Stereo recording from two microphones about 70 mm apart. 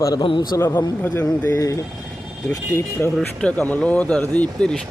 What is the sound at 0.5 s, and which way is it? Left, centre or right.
Speech, left.